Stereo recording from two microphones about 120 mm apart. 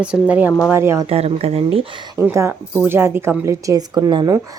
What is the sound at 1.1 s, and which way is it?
Speech, 55° right (ahead or behind).